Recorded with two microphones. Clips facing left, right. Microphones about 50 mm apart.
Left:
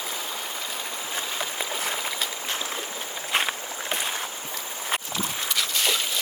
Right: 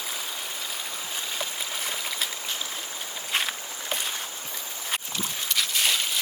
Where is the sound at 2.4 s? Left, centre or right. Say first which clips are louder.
Left 3 dB; left.